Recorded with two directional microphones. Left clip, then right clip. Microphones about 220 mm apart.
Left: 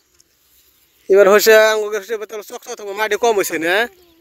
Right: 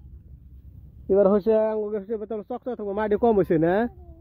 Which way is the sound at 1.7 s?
20° left (ahead or behind).